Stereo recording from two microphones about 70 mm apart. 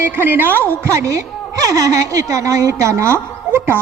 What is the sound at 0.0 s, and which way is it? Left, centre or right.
A woman's voice, right.